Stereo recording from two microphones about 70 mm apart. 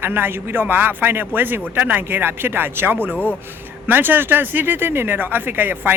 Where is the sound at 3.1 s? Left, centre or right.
Left.